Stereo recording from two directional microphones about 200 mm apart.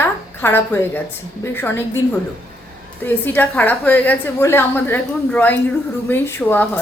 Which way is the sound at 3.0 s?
10° left (ahead or behind).